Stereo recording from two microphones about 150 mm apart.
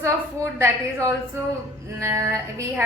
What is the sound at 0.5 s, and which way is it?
A woman's voice, 20° right (ahead or behind).